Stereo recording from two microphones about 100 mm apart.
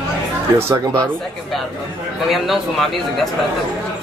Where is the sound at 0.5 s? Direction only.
25° right (ahead or behind).